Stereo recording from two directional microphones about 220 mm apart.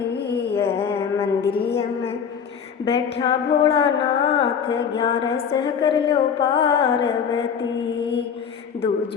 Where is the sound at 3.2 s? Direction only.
20° left (ahead or behind).